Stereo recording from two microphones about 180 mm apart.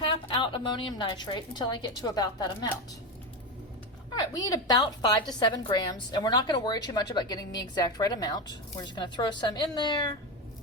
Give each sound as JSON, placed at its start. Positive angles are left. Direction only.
{"t": 0.1, "sound": "a woman's voice", "side_deg": 30}
{"t": 4.1, "sound": "a woman's voice", "side_deg": 20}